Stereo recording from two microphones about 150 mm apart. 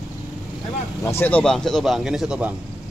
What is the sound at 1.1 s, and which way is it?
Speech, 15° left (ahead or behind).